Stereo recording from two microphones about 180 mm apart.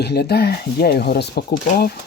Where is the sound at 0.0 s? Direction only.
65° left (ahead or behind).